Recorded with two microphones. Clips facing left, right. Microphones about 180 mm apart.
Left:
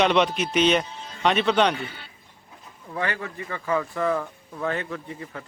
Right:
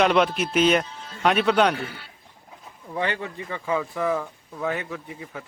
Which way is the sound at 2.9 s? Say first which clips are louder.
Right 2 dB; 20° right (ahead or behind).